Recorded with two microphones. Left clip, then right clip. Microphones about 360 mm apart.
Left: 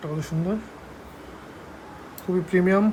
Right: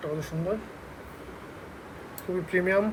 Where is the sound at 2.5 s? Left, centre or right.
Left.